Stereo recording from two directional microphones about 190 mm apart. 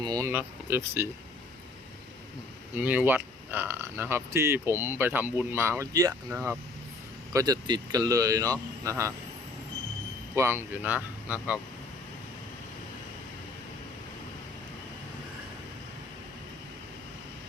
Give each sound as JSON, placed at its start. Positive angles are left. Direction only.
{"t": 0.0, "sound": "speech", "side_deg": -20}
{"t": 2.7, "sound": "speech", "side_deg": -10}
{"t": 10.3, "sound": "speech", "side_deg": -15}